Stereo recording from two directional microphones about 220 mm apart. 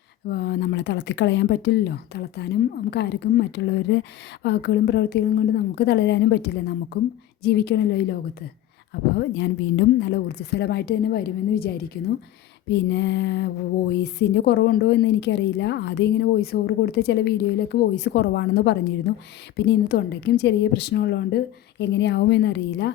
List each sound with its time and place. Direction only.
0.3 s a woman's voice: 50° left (ahead or behind)